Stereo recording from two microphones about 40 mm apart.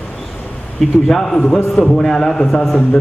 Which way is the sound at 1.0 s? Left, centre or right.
Centre.